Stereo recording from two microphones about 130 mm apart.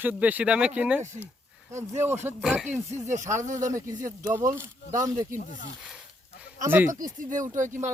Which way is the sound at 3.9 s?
80° right.